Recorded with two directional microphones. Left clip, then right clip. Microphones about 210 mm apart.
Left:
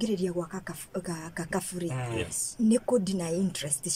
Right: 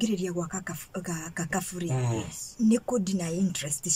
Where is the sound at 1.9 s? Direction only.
20° right (ahead or behind).